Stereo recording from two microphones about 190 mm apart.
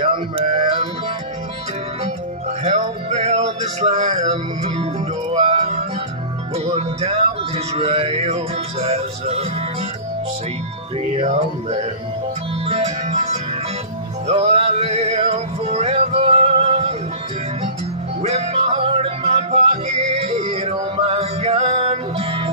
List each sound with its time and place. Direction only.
0.0 s music: 35° right (ahead or behind)
2.6 s music: 40° right (ahead or behind)
7.0 s music: 35° right (ahead or behind)
11.1 s music: 35° right (ahead or behind)
18.2 s music: 35° right (ahead or behind)